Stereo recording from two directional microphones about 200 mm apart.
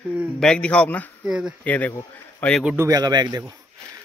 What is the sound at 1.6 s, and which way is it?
A man's voice, 10° left (ahead or behind).